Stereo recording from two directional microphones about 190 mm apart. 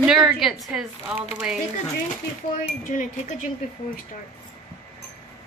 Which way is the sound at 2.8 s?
40° left (ahead or behind).